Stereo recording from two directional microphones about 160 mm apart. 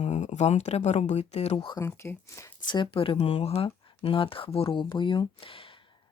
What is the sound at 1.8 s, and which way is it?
Speech, 15° left (ahead or behind).